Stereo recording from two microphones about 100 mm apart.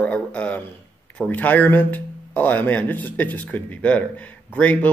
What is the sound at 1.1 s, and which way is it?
Speech, 15° left (ahead or behind).